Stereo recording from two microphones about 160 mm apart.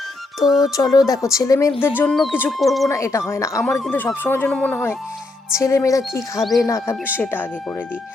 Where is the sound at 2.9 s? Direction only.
20° left (ahead or behind).